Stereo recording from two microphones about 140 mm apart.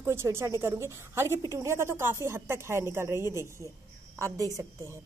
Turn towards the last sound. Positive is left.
turn(degrees=-25)  # may be behind; listen again after turning